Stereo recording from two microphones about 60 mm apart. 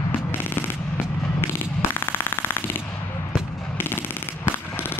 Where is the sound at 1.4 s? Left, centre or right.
Left.